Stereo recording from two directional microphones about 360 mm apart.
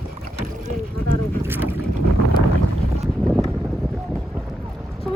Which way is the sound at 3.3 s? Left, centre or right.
Centre.